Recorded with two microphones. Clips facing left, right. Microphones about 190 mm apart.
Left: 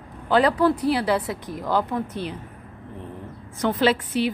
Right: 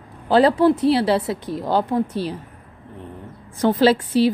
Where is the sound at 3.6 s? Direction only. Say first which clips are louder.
Right 5 dB; 30° right (ahead or behind).